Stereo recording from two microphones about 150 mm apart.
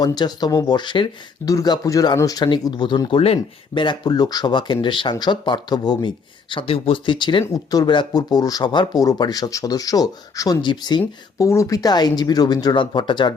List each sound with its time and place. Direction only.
0.0 s speech: 25° left (ahead or behind)
11.0 s speech: 20° left (ahead or behind)